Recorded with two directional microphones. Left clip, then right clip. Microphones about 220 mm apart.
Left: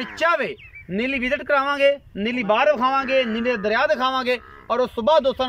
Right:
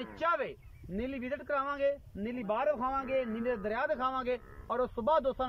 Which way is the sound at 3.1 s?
45° left (ahead or behind).